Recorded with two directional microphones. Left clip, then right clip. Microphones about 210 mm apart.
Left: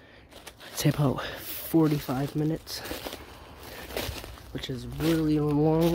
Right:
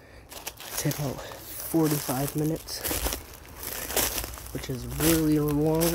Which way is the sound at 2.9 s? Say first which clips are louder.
Right 7 dB; 60° right (ahead or behind).